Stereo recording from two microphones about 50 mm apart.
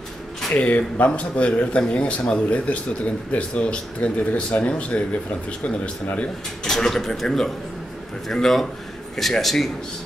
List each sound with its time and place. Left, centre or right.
0.5 s speech: left
6.6 s a man's voice: centre